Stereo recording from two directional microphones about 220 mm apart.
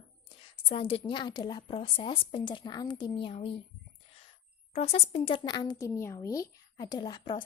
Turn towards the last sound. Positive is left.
turn(degrees=20)  # may be behind; listen again after turning